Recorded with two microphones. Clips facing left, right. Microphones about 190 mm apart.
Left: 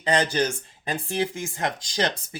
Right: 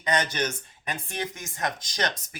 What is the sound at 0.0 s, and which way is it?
Speech, 30° left (ahead or behind).